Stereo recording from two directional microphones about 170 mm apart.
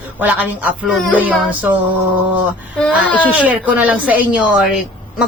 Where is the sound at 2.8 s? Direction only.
10° left (ahead or behind).